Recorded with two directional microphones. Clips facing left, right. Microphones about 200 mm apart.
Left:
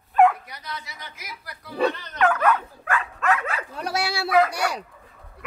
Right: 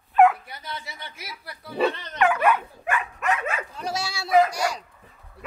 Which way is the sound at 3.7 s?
65° left (ahead or behind).